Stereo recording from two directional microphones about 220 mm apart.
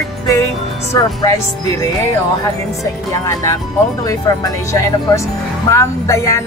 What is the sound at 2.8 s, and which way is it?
Speech, 15° left (ahead or behind).